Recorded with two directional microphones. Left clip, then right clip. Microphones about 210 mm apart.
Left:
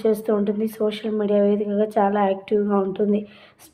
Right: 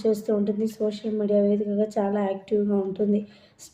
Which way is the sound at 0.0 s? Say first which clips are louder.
Left 3 dB; 10° left (ahead or behind).